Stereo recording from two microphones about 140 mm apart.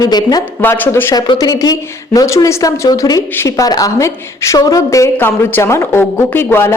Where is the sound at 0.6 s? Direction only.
15° left (ahead or behind).